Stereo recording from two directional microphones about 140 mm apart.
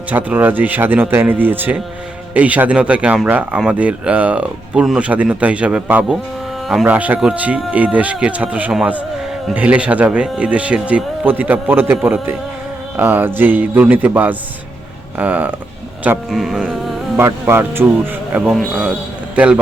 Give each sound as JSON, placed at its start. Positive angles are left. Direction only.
{"t": 0.1, "sound": "speech", "side_deg": -10}
{"t": 17.2, "sound": "speech", "side_deg": -15}
{"t": 18.5, "sound": "speech", "side_deg": 0}